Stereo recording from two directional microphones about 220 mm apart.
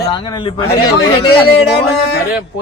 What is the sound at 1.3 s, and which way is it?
Speech, 50° left (ahead or behind).